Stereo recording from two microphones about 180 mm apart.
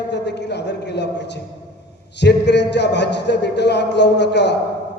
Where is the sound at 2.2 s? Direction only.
70° left (ahead or behind).